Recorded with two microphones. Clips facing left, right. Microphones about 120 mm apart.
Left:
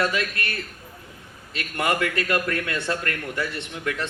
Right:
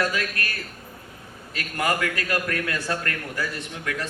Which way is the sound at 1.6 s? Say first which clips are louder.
Left 1 dB; 25° left (ahead or behind).